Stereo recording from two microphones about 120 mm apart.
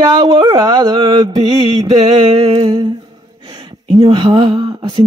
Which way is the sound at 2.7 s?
35° right (ahead or behind).